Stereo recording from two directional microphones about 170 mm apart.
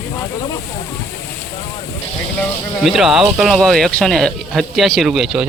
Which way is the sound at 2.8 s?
Centre (ahead or behind).